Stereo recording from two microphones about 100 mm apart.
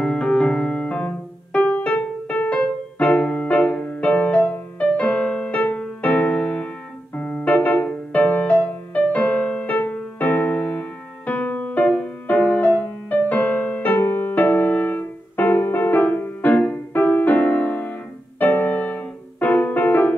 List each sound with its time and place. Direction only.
0.0 s music: 5° left (ahead or behind)